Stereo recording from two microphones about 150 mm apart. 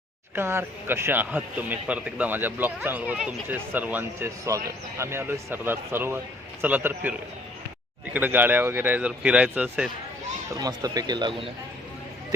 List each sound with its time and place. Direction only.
0.3 s a man's voice: 15° right (ahead or behind)
10.6 s speech: 25° right (ahead or behind)